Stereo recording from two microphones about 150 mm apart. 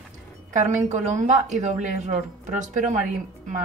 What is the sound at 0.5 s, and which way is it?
A woman's voice, 55° right (ahead or behind).